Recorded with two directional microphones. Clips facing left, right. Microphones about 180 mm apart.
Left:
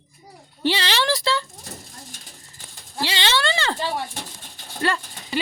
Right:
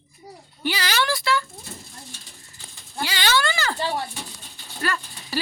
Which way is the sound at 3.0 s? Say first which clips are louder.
Even; 25° left (ahead or behind).